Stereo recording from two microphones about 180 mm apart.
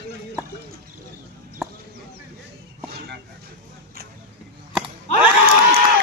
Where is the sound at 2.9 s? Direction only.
60° right (ahead or behind).